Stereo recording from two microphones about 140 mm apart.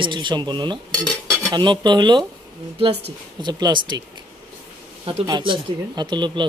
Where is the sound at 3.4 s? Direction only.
30° right (ahead or behind).